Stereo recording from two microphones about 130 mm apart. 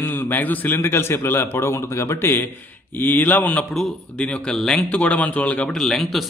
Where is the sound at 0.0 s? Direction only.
15° left (ahead or behind).